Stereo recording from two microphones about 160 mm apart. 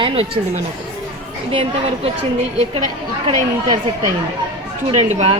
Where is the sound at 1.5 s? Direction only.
35° right (ahead or behind).